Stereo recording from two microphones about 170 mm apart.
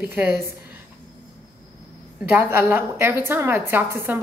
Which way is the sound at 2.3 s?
10° right (ahead or behind).